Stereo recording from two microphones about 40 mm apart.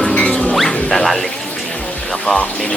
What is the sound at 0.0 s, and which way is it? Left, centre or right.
Dog, left.